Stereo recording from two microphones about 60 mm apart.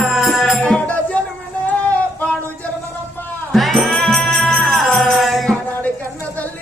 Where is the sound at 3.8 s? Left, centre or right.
Centre.